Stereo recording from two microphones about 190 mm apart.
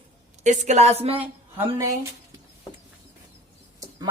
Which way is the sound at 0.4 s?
40° right (ahead or behind).